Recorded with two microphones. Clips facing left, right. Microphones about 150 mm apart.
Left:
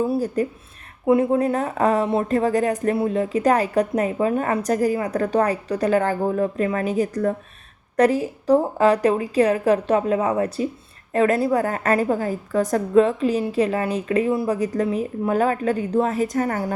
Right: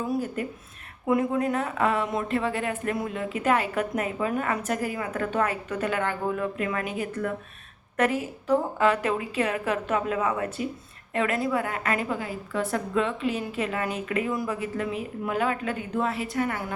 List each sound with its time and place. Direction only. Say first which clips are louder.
0.0 s speech: left 7 dB; 35° left (ahead or behind)